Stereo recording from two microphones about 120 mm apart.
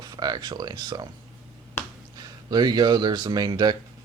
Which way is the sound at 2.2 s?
35° right (ahead or behind).